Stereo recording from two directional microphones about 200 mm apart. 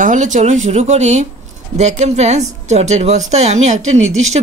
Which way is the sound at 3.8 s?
80° right.